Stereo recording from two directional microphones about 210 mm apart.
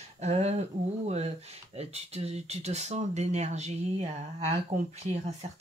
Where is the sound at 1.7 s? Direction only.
30° right (ahead or behind).